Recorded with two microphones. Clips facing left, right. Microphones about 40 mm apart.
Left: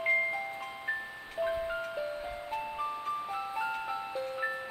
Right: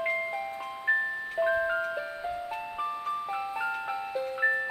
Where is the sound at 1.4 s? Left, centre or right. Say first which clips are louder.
Right 5 dB; right.